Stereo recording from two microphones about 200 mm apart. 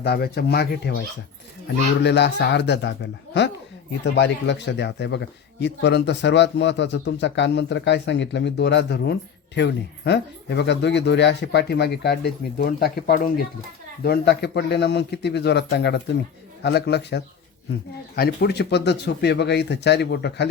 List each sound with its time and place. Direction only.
0.0 s speech: 50° left (ahead or behind)
2.0 s speech: 60° left (ahead or behind)